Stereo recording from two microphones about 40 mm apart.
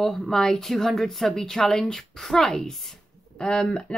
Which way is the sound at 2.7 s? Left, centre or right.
Centre.